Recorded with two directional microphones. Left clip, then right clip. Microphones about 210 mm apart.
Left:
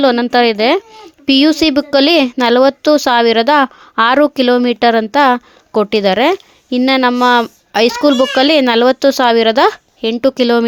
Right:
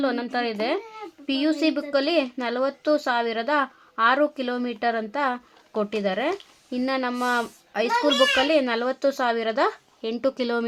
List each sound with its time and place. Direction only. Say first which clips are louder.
0.0 s a woman's voice: left 15 dB; 45° left (ahead or behind)